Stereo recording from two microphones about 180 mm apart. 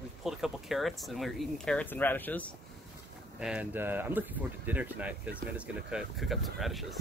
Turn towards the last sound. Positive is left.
turn(degrees=0)  # may be behind; listen again after turning